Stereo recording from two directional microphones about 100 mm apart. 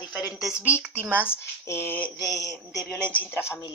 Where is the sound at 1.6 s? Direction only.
25° left (ahead or behind).